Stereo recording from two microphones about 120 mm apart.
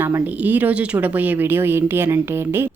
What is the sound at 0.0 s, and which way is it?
A woman's voice, 15° right (ahead or behind).